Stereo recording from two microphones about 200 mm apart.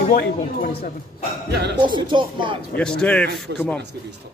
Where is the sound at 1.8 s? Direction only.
25° right (ahead or behind).